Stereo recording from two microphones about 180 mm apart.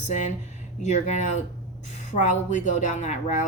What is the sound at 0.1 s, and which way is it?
Speech, 40° left (ahead or behind).